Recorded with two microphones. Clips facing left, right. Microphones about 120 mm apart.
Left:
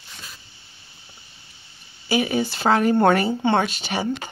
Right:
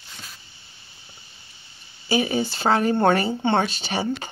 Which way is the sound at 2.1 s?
25° right (ahead or behind).